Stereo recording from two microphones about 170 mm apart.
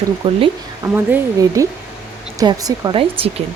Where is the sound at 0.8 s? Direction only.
20° right (ahead or behind).